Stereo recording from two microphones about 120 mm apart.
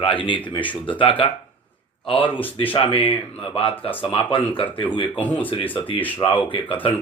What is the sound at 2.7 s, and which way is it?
Speech, 50° left (ahead or behind).